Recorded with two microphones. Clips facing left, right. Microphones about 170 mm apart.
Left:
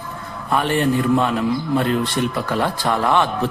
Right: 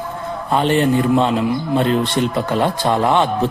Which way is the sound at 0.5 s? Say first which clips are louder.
Right 3 dB; 20° right (ahead or behind).